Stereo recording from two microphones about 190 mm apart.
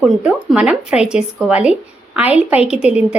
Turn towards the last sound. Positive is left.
turn(degrees=-5)  # may be behind; listen again after turning